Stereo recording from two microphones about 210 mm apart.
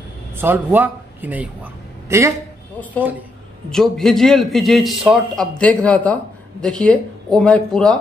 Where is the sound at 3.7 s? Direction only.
Centre (ahead or behind).